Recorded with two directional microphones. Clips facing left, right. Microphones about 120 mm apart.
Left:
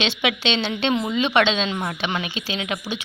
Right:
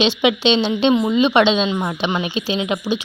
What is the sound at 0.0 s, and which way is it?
Speech, 20° right (ahead or behind).